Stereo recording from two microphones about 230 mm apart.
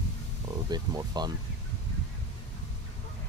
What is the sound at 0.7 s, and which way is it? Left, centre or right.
Speech, centre.